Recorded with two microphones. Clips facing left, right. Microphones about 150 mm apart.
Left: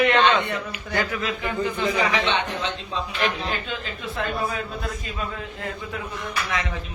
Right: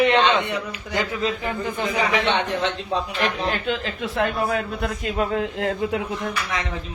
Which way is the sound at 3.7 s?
85° right.